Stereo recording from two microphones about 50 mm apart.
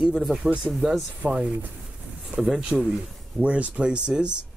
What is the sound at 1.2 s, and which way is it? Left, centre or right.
Speech, right.